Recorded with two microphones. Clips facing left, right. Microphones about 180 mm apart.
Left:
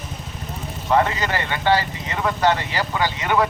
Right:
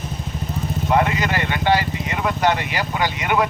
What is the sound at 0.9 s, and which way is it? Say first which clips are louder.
Speech: even; 15° right (ahead or behind).